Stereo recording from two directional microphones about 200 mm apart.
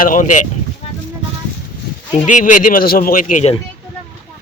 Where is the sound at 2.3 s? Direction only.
40° left (ahead or behind).